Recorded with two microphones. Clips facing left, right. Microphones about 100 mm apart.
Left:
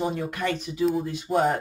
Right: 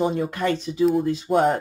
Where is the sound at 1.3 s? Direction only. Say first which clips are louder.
Right 3 dB; 65° right (ahead or behind).